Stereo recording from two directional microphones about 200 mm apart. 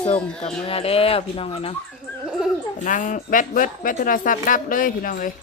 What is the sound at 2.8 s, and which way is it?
A woman's voice, 40° left (ahead or behind).